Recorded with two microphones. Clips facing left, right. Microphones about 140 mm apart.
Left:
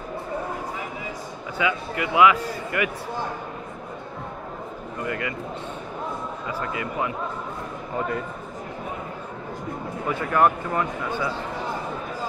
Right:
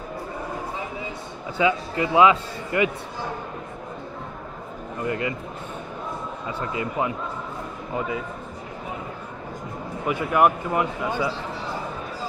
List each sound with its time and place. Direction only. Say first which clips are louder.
1.6 s speech: right 4 dB; 30° right (ahead or behind)
5.0 s speech: right 3 dB; 25° right (ahead or behind)
6.6 s speech: right 3 dB; 25° right (ahead or behind)
10.0 s speech: right 1 dB; 15° right (ahead or behind)